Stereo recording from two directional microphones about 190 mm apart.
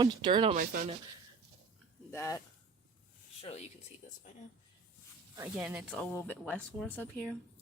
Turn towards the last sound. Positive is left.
turn(degrees=5)  # may be behind; listen again after turning